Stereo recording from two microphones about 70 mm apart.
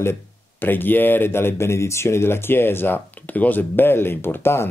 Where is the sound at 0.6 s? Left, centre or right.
Left.